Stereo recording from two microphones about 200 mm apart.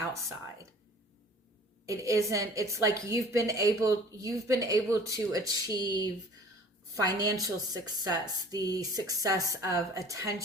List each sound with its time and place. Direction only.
1.9 s a woman's voice: 15° right (ahead or behind)